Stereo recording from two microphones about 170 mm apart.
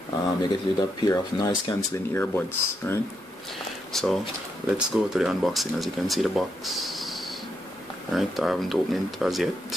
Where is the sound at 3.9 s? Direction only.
Centre (ahead or behind).